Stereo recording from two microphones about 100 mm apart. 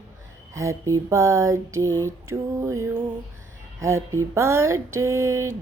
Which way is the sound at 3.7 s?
30° right (ahead or behind).